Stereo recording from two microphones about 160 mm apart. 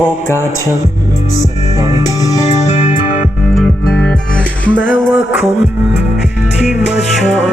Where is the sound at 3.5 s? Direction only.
5° left (ahead or behind).